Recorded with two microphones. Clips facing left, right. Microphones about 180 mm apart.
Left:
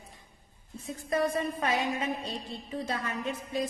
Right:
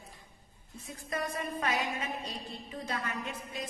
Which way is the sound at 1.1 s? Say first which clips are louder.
Left 7 dB; 30° left (ahead or behind).